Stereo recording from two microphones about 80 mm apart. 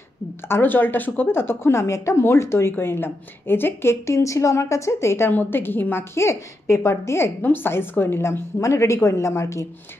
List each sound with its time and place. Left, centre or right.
0.5 s speech: left